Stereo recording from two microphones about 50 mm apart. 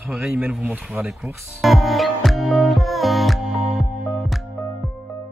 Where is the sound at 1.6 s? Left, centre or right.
Centre.